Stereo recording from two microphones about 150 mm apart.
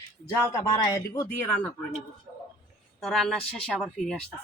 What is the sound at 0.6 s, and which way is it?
Speech, 25° left (ahead or behind).